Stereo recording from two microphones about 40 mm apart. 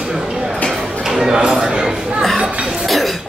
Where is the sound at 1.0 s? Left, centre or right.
Centre.